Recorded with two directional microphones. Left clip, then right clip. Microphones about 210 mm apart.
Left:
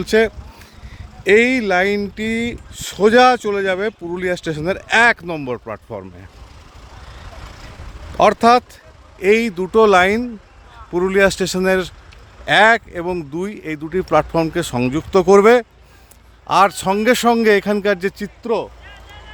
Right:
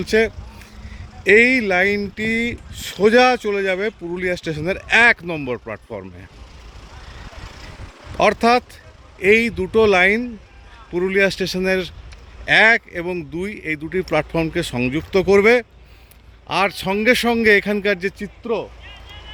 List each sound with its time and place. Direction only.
0.0 s speech: 20° left (ahead or behind); by 6.2 s 5° left (ahead or behind)
7.2 s vehicle: 45° left (ahead or behind)
8.2 s speech: 15° left (ahead or behind)